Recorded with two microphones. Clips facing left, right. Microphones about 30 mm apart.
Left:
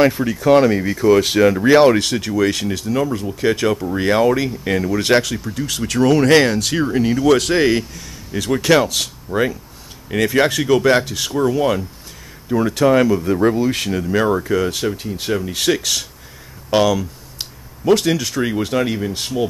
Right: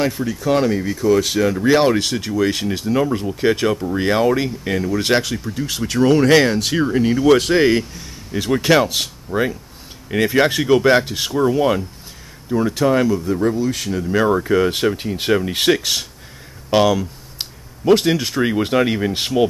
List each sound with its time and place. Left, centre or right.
0.3 s speech: centre
1.8 s speech: centre
2.7 s speech: centre
3.6 s speech: centre
6.2 s speech: centre
11.3 s speech: centre
12.4 s speech: centre
13.2 s speech: left
14.1 s speech: centre
14.4 s speech: centre